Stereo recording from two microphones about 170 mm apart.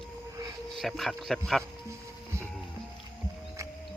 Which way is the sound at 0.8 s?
Centre (ahead or behind).